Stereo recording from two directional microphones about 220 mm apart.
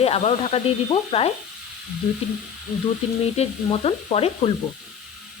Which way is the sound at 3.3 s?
25° left (ahead or behind).